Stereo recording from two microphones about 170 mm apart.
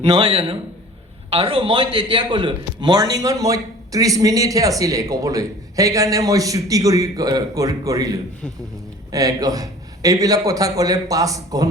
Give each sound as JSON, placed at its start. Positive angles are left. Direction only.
{"t": 0.1, "sound": "a man's voice", "side_deg": -30}